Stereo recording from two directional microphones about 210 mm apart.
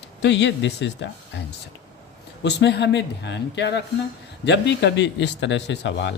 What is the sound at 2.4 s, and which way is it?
Speech, 55° left (ahead or behind).